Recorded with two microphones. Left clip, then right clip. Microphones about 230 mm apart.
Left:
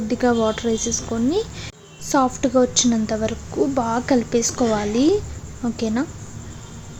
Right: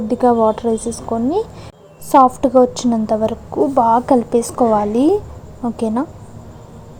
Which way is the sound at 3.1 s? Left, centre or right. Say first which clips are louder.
Right 5 dB; centre.